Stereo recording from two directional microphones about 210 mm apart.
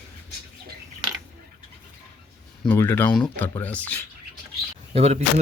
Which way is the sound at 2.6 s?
10° left (ahead or behind).